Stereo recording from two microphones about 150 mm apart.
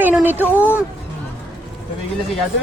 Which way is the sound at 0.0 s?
10° right (ahead or behind).